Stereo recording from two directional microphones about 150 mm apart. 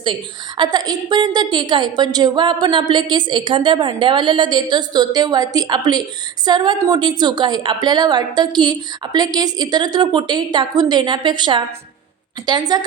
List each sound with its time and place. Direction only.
0.0 s a woman's voice: 30° right (ahead or behind)